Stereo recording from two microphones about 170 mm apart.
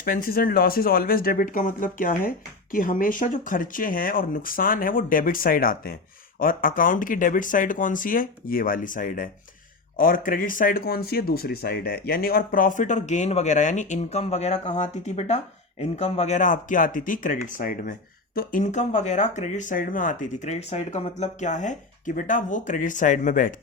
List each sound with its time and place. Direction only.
0.0 s speech: 60° left (ahead or behind)